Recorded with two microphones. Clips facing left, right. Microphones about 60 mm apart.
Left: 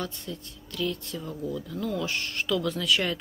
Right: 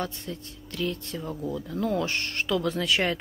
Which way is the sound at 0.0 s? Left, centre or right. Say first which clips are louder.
Right 2 dB; right.